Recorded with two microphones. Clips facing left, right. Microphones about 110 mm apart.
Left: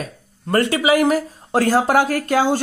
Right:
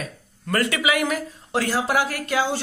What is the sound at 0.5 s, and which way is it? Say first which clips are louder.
Speech: left 6 dB; 30° left (ahead or behind).